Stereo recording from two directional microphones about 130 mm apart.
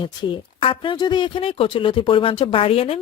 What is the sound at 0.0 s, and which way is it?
Speech, 40° left (ahead or behind).